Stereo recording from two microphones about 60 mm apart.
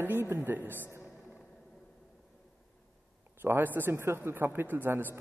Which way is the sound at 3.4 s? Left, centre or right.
Right.